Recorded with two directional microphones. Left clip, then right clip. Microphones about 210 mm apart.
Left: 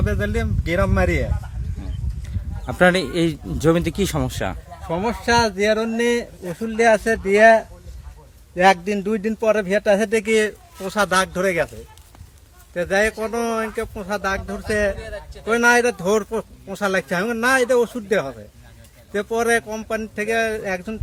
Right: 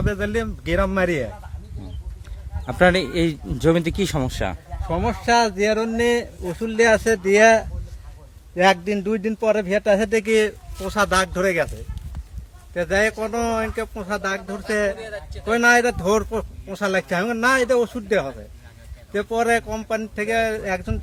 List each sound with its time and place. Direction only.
0.0 s a man's voice: 5° right (ahead or behind)
2.6 s a man's voice: centre (ahead or behind)
6.0 s speech: 20° right (ahead or behind); by 7.6 s 40° right (ahead or behind)
8.5 s a man's voice: 5° right (ahead or behind)
12.7 s a man's voice: centre (ahead or behind)
14.9 s speech: 20° right (ahead or behind)
15.4 s a man's voice: centre (ahead or behind)